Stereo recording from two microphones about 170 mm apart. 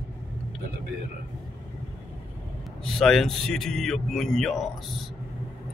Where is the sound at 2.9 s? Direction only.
Centre (ahead or behind).